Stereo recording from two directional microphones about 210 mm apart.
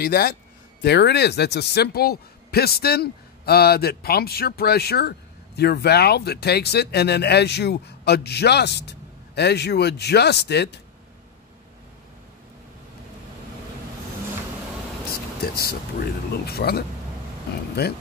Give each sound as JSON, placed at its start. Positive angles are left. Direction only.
{"t": 0.0, "sound": "speech", "side_deg": 45}
{"t": 15.5, "sound": "speech", "side_deg": 50}